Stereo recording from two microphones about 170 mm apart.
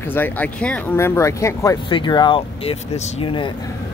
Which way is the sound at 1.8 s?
30° left (ahead or behind).